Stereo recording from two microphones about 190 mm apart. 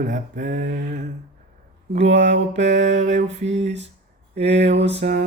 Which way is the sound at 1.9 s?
65° right (ahead or behind).